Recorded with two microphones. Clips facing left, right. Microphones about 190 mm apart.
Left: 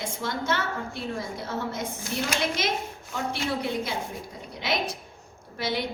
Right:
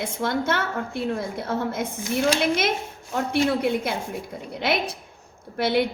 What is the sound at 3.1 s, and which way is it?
Speech, 55° right (ahead or behind).